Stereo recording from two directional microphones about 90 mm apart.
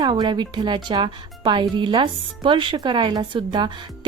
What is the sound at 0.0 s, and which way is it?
Speech, 55° right (ahead or behind).